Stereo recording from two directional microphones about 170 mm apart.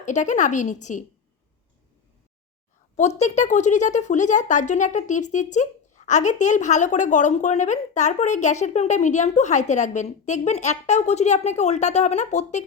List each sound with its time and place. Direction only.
0.0 s speech: 45° left (ahead or behind)
3.2 s speech: 45° left (ahead or behind)